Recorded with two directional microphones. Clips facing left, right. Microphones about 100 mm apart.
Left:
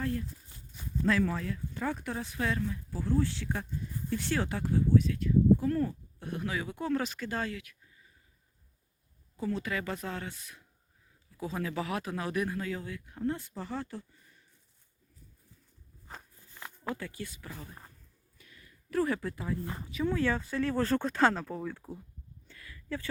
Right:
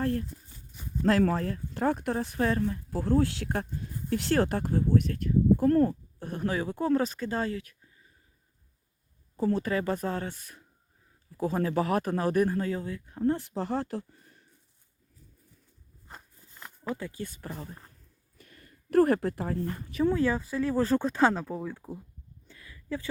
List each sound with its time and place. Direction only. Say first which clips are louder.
0.0 s speech: right 5 dB; 50° right (ahead or behind)
2.4 s speech: right 4 dB; 45° right (ahead or behind); by 4.5 s 60° right (ahead or behind)
4.5 s speech: right 1 dB; 40° right (ahead or behind)
9.4 s speech: right 6 dB; 40° right (ahead or behind)
13.8 s speech: right 7 dB; 60° right (ahead or behind)
16.9 s speech: right 4 dB; 20° right (ahead or behind)
17.4 s speech: right 6 dB; 40° right (ahead or behind)
18.3 s a sound: right 4 dB; 50° right (ahead or behind)
20.2 s speech: right 3 dB; 10° right (ahead or behind)
22.4 s a sound: right 3 dB; 20° right (ahead or behind)